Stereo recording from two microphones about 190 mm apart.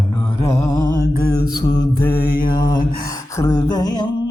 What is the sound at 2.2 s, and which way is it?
Mantra, 50° left (ahead or behind).